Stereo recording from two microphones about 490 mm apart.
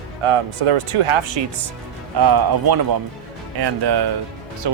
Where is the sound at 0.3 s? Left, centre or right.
Right.